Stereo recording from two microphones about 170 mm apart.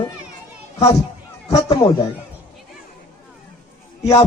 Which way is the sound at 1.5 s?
20° left (ahead or behind).